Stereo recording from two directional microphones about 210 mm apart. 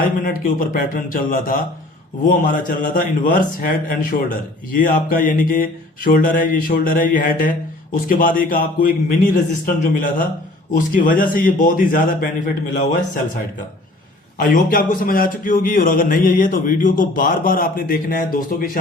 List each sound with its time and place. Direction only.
0.0 s a man's voice: 40° left (ahead or behind)
14.3 s a man's voice: 40° left (ahead or behind)